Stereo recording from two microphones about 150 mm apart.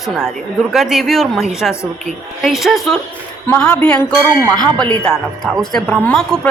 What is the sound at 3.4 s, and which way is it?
Speech, 10° left (ahead or behind).